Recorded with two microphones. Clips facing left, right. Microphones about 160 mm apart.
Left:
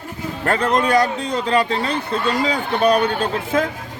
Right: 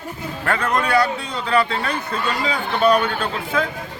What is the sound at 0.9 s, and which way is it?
Speech, 40° left (ahead or behind).